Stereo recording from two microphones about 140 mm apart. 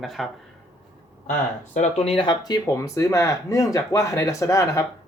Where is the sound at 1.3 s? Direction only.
55° left (ahead or behind).